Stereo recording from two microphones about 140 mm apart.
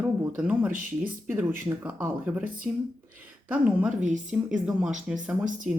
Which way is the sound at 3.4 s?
10° right (ahead or behind).